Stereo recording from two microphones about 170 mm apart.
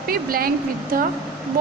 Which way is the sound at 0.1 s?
60° right (ahead or behind).